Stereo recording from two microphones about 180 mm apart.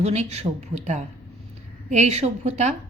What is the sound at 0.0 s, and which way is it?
Speech, 40° right (ahead or behind).